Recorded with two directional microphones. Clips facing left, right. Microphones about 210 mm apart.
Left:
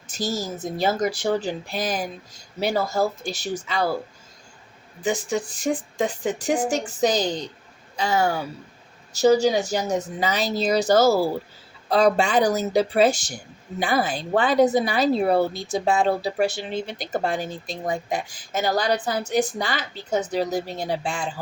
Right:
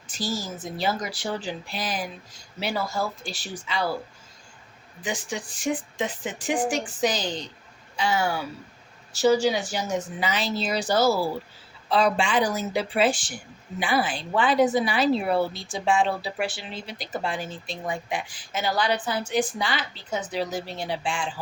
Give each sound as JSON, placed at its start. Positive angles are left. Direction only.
{"t": 0.1, "sound": "speech", "side_deg": 45}
{"t": 5.0, "sound": "speech", "side_deg": 40}